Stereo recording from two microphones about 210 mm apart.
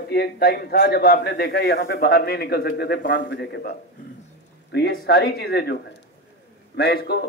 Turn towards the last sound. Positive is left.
turn(degrees=50)  # may be behind; listen again after turning